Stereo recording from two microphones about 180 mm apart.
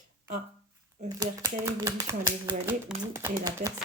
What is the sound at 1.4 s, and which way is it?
Speech, 15° right (ahead or behind).